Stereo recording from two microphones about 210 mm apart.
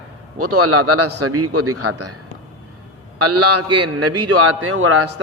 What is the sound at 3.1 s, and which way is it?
A man's voice, 90° right.